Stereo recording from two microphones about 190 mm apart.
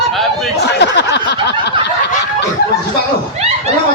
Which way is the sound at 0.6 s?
65° left (ahead or behind).